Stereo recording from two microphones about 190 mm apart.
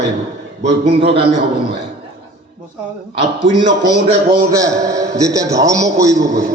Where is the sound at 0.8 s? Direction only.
30° right (ahead or behind).